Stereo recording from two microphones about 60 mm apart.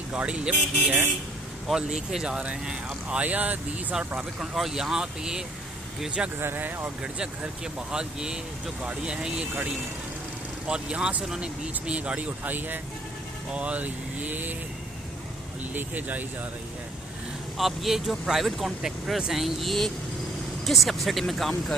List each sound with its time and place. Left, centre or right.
0.1 s speech: centre
1.6 s speech: centre; by 3.9 s right
4.2 s speech: centre
6.4 s speech: right
7.0 s speech: centre
10.7 s speech: centre
15.7 s speech: right
17.6 s speech: centre